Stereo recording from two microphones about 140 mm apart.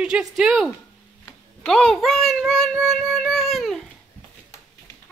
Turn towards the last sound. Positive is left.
turn(degrees=0)  # may be behind; listen again after turning